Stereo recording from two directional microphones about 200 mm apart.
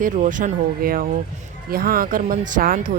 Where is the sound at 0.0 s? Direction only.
40° right (ahead or behind).